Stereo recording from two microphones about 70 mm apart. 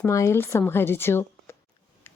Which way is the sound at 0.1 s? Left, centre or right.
Left.